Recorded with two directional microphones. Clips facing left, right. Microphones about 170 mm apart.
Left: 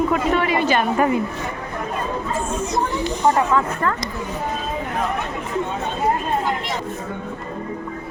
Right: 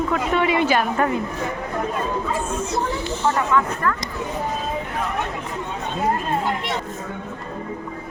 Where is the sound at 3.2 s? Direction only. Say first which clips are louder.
Left 2 dB; 35° left (ahead or behind).